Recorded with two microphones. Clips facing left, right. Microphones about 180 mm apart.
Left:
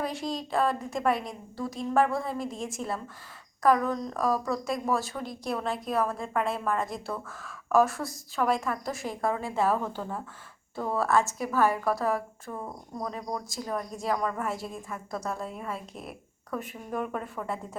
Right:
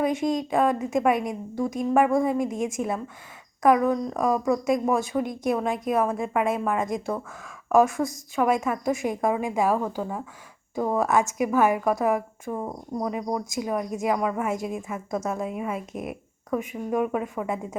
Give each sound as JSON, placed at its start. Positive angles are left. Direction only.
{"t": 0.0, "sound": "a woman's voice", "side_deg": -20}
{"t": 15.1, "sound": "a woman's voice", "side_deg": -20}